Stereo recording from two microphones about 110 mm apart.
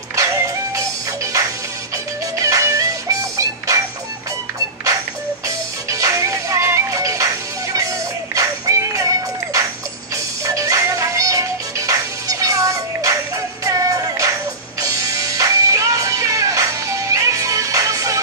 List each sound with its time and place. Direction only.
0.1 s music: 30° right (ahead or behind)
5.9 s music: 30° right (ahead or behind)